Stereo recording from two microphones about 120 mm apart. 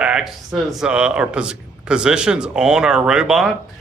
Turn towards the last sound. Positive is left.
turn(degrees=-5)  # may be behind; listen again after turning